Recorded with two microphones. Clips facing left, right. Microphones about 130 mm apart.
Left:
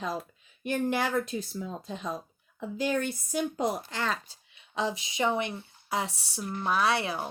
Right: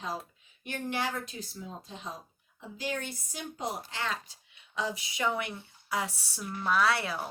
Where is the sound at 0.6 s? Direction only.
50° left (ahead or behind); by 6.4 s 25° left (ahead or behind).